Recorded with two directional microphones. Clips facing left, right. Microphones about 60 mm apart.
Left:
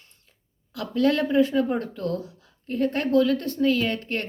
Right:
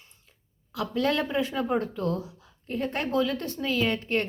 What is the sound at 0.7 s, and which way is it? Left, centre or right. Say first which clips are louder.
A woman's voice: left 4 dB; right.